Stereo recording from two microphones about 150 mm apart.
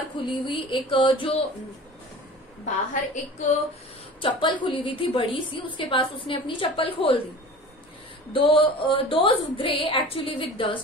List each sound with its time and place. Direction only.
0.2 s a woman's voice: 35° left (ahead or behind)
2.6 s a woman's voice: 50° left (ahead or behind)
4.2 s a woman's voice: 35° left (ahead or behind)
8.3 s a woman's voice: 35° left (ahead or behind)